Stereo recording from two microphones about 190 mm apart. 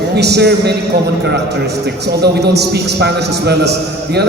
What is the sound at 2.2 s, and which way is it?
A man's voice, 60° right (ahead or behind).